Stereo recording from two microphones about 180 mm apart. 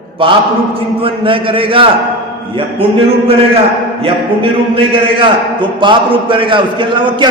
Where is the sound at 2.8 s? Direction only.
30° right (ahead or behind).